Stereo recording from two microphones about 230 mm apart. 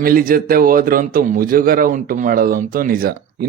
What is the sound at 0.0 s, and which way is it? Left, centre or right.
A man's voice, right.